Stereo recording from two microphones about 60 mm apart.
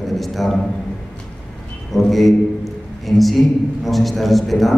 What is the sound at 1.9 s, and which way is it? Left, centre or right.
A man's voice, centre.